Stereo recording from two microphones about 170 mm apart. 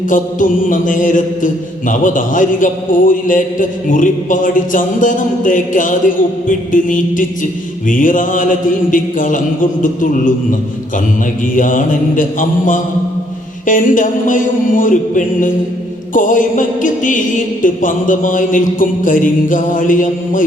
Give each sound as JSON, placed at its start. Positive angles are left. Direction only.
{"t": 0.1, "sound": "music", "side_deg": 50}
{"t": 11.5, "sound": "music", "side_deg": 50}